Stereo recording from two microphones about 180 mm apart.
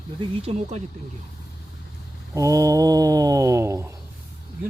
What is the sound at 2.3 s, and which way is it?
Mantra, 15° right (ahead or behind).